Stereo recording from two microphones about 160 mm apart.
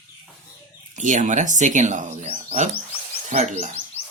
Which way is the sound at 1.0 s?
50° right (ahead or behind).